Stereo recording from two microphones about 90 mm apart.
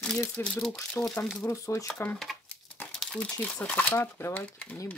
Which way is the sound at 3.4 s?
15° left (ahead or behind).